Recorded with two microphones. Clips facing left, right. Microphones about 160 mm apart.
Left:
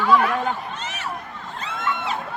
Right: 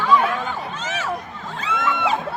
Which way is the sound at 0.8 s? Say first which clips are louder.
Right 5 dB; 90° right.